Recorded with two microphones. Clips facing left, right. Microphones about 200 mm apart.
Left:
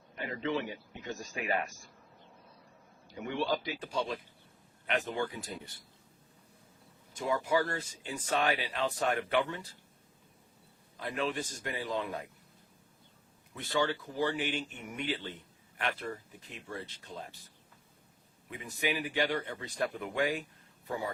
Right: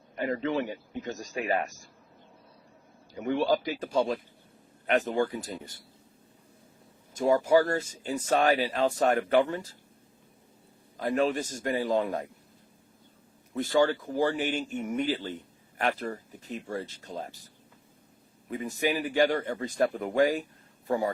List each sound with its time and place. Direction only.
0.3 s speech: 45° right (ahead or behind)
3.2 s speech: 45° right (ahead or behind)
7.1 s speech: 45° right (ahead or behind)
10.9 s speech: 45° right (ahead or behind)
13.5 s speech: 45° right (ahead or behind)
18.4 s speech: 40° right (ahead or behind)